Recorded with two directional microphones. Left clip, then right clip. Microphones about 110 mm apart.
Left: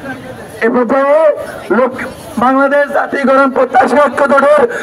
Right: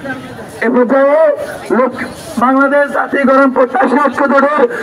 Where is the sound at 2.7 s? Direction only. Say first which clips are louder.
Even; 30° left (ahead or behind); by 4.7 s 55° left (ahead or behind).